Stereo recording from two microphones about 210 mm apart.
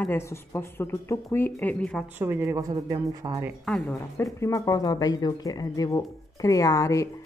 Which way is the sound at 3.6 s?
5° left (ahead or behind).